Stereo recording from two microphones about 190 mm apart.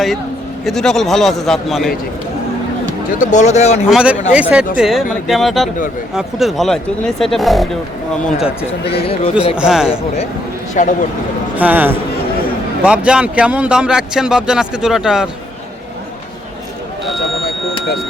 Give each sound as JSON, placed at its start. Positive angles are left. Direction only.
{"t": 0.6, "sound": "speech", "side_deg": 0}
{"t": 3.2, "sound": "speech", "side_deg": 40}
{"t": 3.8, "sound": "speech", "side_deg": -5}
{"t": 9.0, "sound": "speech", "side_deg": 30}
{"t": 9.6, "sound": "speech", "side_deg": -5}
{"t": 10.8, "sound": "speech", "side_deg": 40}
{"t": 11.5, "sound": "a man's voice", "side_deg": -10}
{"t": 13.1, "sound": "speech", "side_deg": -5}